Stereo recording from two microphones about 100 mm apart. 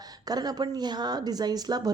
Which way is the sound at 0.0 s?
40° right (ahead or behind).